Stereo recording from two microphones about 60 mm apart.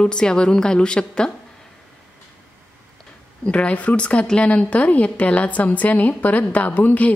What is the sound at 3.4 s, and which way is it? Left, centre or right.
A woman's voice, centre.